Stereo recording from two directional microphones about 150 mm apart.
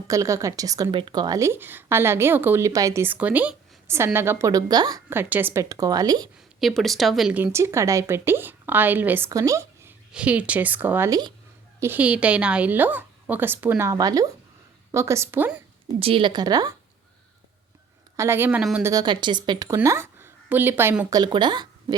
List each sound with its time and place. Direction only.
0.1 s a woman's voice: 20° right (ahead or behind)
5.1 s a woman's voice: 15° right (ahead or behind)
6.6 s speech: centre (ahead or behind); by 9.9 s 20° right (ahead or behind)
10.1 s speech: 10° right (ahead or behind)
16.0 s a woman's voice: 40° right (ahead or behind)
18.2 s a woman's voice: 15° right (ahead or behind)
21.1 s speech: 30° right (ahead or behind)